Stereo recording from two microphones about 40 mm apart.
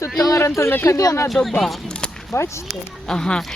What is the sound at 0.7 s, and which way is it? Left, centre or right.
Speech, left.